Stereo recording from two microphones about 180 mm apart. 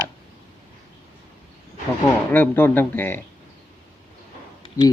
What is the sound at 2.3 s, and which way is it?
Speech, 10° left (ahead or behind).